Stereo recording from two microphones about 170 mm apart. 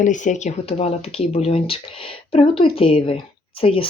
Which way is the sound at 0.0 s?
45° left (ahead or behind).